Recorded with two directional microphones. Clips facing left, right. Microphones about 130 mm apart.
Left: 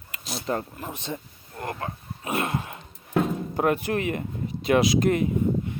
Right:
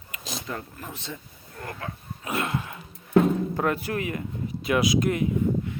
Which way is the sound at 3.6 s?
20° left (ahead or behind).